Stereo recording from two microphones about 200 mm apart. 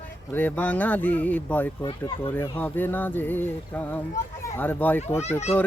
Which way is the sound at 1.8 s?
20° left (ahead or behind).